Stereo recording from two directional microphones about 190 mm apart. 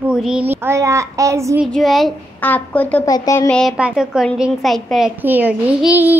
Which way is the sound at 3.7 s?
5° right (ahead or behind).